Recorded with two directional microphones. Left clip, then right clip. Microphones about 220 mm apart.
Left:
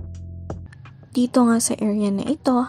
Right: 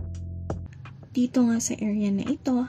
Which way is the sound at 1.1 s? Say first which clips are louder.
Left 6 dB; 25° left (ahead or behind).